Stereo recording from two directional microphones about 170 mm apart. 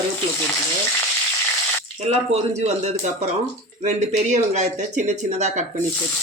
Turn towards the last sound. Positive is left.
turn(degrees=-45)  # may be behind; listen again after turning